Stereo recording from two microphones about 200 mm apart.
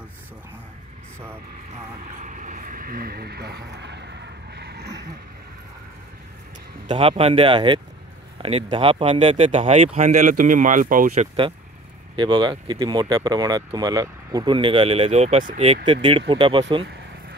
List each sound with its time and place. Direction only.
2.2 s vehicle: 40° right (ahead or behind); by 5.0 s 55° right (ahead or behind)
6.9 s speech: 30° right (ahead or behind)
12.2 s speech: 25° right (ahead or behind)